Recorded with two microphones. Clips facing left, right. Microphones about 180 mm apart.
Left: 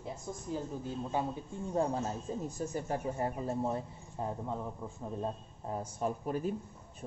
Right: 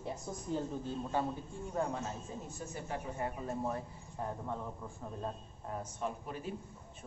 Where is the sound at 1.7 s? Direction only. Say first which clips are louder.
Left 4 dB; 30° left (ahead or behind).